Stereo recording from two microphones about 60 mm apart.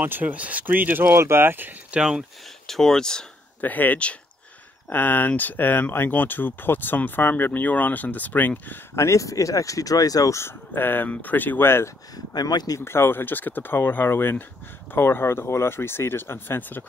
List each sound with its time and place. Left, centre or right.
0.0 s speech: right
1.0 s speech: right
1.9 s speech: centre
2.6 s speech: centre
3.6 s speech: left
8.9 s speech: left
10.3 s speech: left
12.4 s speech: left
12.8 s speech: left